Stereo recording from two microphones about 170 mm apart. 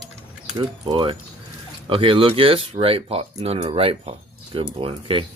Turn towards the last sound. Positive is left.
turn(degrees=-30)  # may be behind; listen again after turning